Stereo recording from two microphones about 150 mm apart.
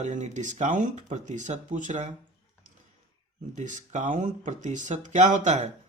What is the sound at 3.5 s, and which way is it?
Speech, 55° right (ahead or behind).